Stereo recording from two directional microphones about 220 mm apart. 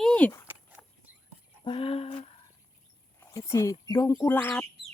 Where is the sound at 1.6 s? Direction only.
25° left (ahead or behind).